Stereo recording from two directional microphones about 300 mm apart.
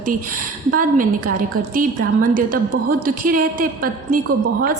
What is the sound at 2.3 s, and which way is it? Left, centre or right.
A woman's voice, right.